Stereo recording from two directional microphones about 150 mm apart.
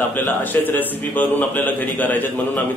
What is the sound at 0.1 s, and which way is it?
A man's voice, 10° left (ahead or behind).